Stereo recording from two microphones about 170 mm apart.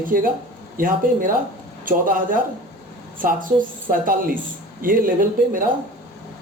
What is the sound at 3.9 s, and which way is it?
Speech, 55° right (ahead or behind).